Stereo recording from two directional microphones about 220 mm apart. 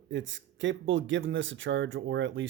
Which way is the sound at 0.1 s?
55° right (ahead or behind).